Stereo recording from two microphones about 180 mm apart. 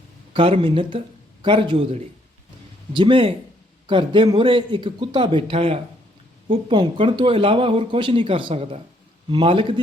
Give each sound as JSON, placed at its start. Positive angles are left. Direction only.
{"t": 0.3, "sound": "speech", "side_deg": -30}